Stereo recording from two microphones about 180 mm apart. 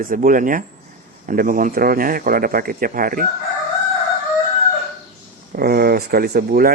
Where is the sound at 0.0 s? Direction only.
50° right (ahead or behind).